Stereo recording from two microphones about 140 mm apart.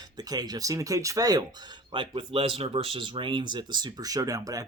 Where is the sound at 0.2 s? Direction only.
30° right (ahead or behind).